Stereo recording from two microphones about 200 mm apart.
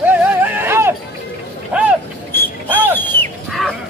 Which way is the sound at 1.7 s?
5° right (ahead or behind).